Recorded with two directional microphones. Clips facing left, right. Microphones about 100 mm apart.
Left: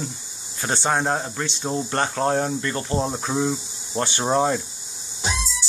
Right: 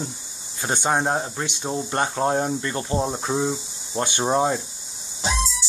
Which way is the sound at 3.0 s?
5° right (ahead or behind).